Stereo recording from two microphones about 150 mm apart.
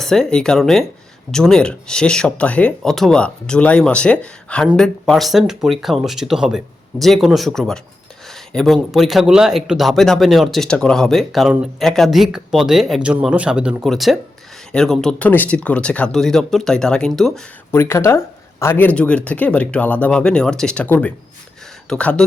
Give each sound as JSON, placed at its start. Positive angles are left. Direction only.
{"t": 0.0, "sound": "speech", "side_deg": 5}
{"t": 17.7, "sound": "speech", "side_deg": 15}